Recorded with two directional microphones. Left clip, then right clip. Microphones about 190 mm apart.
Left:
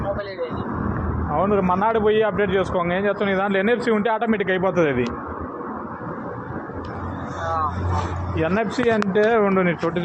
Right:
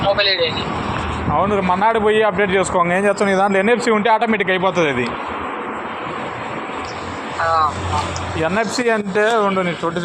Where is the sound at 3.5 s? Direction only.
20° right (ahead or behind).